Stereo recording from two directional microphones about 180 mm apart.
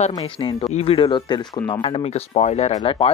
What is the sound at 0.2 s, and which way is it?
Speech, 30° left (ahead or behind).